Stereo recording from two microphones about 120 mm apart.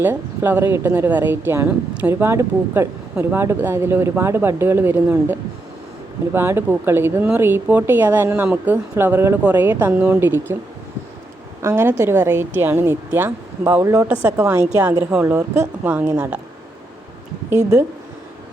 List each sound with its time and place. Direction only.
0.0 s a woman's voice: 20° right (ahead or behind)
11.6 s a woman's voice: 20° right (ahead or behind)